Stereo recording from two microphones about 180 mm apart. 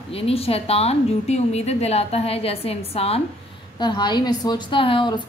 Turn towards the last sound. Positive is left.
turn(degrees=25)  # may be behind; listen again after turning